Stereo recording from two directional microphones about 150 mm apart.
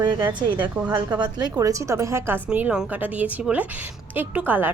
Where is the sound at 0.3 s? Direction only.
30° right (ahead or behind).